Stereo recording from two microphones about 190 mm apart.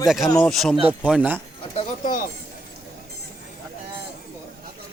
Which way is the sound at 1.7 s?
45° left (ahead or behind).